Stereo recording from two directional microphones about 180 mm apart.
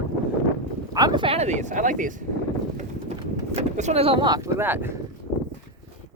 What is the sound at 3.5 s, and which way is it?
Speech, 40° right (ahead or behind).